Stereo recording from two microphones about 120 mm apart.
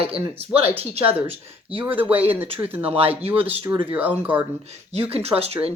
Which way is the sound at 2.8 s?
55° right (ahead or behind).